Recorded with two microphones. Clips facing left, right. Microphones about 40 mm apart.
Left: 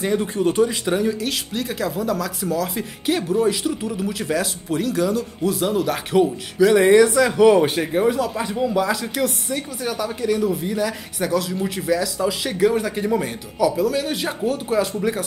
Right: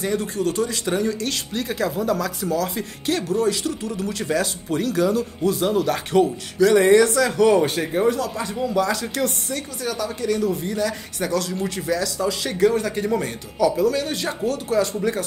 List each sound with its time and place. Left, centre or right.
0.0 s speech: left
0.8 s speech: centre